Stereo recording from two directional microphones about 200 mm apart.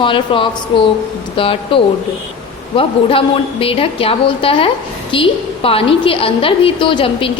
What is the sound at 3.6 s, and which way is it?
A woman's voice, 30° left (ahead or behind).